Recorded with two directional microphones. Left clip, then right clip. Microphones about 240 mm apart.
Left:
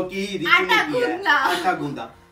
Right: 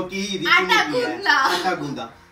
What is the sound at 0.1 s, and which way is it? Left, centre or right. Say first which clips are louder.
A woman's voice: right 1 dB; centre.